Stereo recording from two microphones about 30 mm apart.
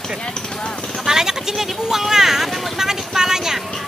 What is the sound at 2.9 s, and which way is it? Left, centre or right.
Vehicle, centre.